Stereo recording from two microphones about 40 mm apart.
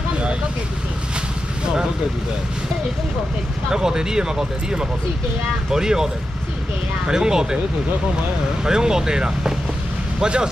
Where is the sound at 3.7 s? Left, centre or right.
Centre.